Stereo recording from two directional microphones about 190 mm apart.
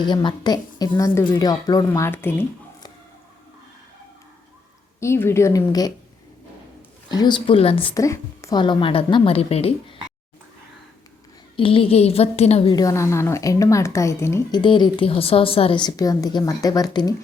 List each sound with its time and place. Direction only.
0.0 s a woman's voice: 25° left (ahead or behind)
4.9 s a woman's voice: 15° left (ahead or behind)
7.1 s a woman's voice: 20° left (ahead or behind)
7.9 s a woman's voice: 15° left (ahead or behind); by 9.7 s 30° left (ahead or behind)
11.5 s a woman's voice: 30° left (ahead or behind)
12.7 s a woman's voice: 15° left (ahead or behind)
14.6 s a woman's voice: 25° left (ahead or behind)